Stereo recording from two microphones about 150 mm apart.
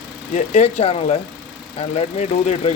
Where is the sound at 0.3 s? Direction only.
50° left (ahead or behind).